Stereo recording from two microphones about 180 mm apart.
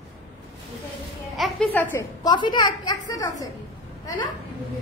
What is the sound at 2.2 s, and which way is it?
A woman's voice, 25° left (ahead or behind).